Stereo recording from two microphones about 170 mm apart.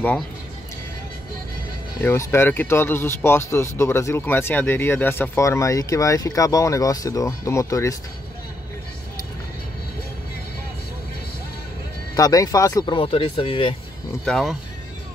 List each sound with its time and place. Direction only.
2.0 s speech: 15° left (ahead or behind)
12.2 s speech: 20° left (ahead or behind)
12.9 s speech: 30° left (ahead or behind)
14.2 s speech: centre (ahead or behind)